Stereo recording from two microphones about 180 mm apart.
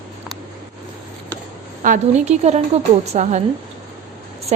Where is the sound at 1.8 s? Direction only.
50° right (ahead or behind).